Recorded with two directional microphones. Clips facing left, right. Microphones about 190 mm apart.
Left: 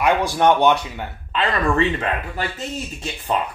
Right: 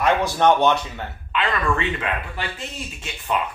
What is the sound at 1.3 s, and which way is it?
Speech, 40° left (ahead or behind).